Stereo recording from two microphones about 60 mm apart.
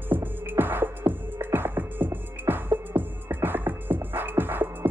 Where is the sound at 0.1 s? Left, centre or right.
Right.